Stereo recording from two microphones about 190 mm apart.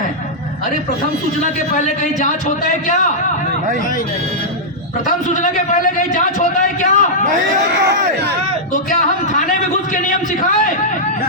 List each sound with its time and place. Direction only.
1.7 s a man's voice: 45° left (ahead or behind)
5.0 s a man's voice: 40° left (ahead or behind)
8.7 s a man's voice: 45° left (ahead or behind)